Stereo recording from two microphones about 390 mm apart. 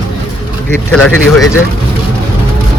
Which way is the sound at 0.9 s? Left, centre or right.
Left.